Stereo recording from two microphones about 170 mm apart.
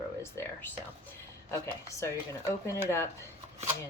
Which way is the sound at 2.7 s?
15° left (ahead or behind).